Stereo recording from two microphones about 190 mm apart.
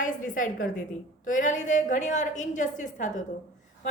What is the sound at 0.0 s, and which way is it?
A woman's voice, 45° left (ahead or behind).